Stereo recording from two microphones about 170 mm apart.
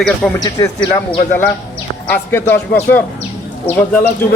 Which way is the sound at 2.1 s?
15° left (ahead or behind).